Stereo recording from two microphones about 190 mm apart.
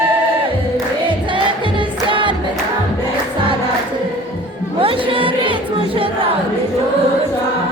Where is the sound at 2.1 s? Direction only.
25° right (ahead or behind).